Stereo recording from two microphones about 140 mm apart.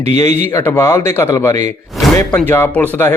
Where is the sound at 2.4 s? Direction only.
15° left (ahead or behind).